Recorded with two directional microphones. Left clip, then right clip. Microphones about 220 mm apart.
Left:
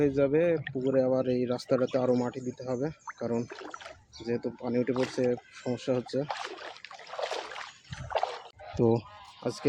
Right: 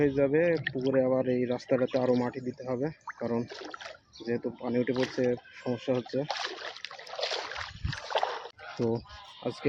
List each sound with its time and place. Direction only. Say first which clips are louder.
0.2 s speech: even; 10° left (ahead or behind)
0.6 s speech: right 1 dB; 5° right (ahead or behind)
0.9 s speech: even; 10° left (ahead or behind)
6.2 s speech: right 2 dB; 5° right (ahead or behind)
7.1 s rowboat: right 1 dB; 5° left (ahead or behind)
8.1 s rowboat: right 1 dB; 25° right (ahead or behind)
8.7 s speech: left 5 dB; 40° left (ahead or behind)